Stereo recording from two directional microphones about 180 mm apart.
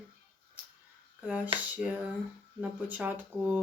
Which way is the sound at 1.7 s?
10° right (ahead or behind).